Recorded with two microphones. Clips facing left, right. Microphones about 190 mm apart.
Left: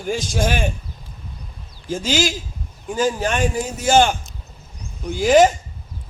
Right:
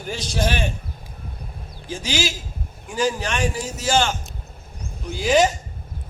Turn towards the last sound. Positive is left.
turn(degrees=50)  # may be behind; listen again after turning